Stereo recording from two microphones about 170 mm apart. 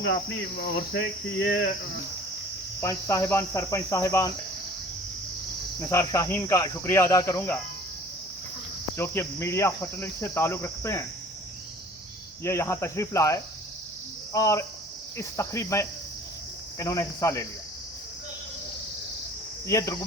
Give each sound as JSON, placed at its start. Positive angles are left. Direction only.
{"t": 0.6, "sound": "cricket", "side_deg": 90}
{"t": 2.8, "sound": "cricket", "side_deg": 20}
{"t": 5.8, "sound": "cricket", "side_deg": 15}
{"t": 9.0, "sound": "cricket", "side_deg": 15}
{"t": 12.4, "sound": "cricket", "side_deg": 15}
{"t": 19.6, "sound": "cricket", "side_deg": 20}